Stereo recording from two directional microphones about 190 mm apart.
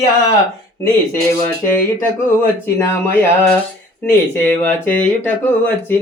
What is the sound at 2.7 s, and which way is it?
Speech, 10° left (ahead or behind).